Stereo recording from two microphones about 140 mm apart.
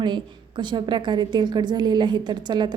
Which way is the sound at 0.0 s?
35° right (ahead or behind).